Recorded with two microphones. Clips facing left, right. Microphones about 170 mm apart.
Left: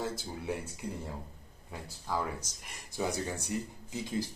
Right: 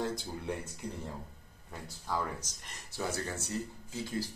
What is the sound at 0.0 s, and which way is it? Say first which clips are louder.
Speech: right 1 dB; 5° left (ahead or behind).